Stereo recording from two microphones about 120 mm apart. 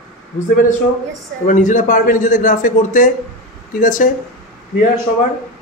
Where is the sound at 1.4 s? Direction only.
90° left.